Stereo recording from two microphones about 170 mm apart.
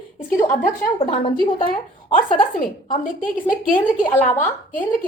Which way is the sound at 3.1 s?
55° left (ahead or behind).